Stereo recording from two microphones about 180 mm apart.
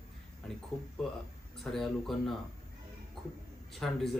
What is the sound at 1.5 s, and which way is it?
Speech, centre (ahead or behind).